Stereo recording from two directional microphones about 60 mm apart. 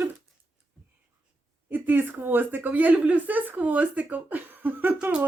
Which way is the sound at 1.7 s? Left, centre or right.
Right.